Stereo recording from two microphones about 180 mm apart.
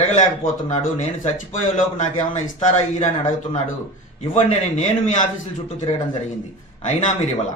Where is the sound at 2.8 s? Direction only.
40° left (ahead or behind).